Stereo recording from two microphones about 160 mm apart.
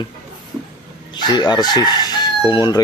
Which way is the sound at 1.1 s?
25° left (ahead or behind).